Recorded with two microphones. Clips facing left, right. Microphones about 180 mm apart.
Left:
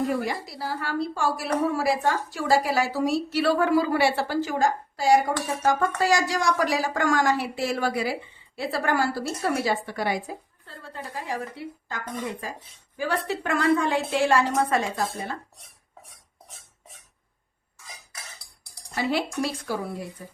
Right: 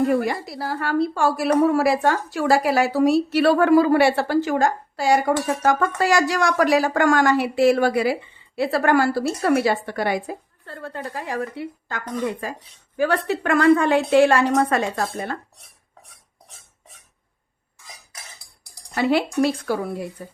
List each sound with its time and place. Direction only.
0.0 s a woman's voice: 60° right (ahead or behind)
18.9 s a woman's voice: 65° right (ahead or behind)